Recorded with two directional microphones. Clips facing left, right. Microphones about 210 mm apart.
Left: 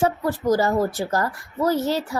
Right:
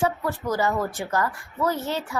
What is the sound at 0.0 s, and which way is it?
A child's voice, 35° left (ahead or behind).